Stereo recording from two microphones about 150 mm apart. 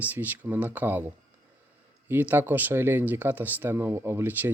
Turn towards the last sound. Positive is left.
turn(degrees=-10)  # may be behind; listen again after turning